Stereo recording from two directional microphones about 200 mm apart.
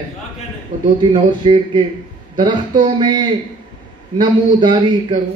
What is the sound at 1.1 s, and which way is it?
Speech, 25° right (ahead or behind).